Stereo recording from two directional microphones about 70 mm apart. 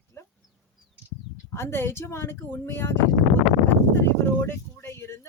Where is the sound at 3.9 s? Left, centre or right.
Left.